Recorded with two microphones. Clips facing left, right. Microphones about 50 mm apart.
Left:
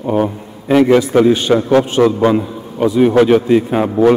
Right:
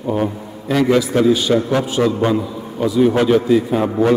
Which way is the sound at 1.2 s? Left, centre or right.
Left.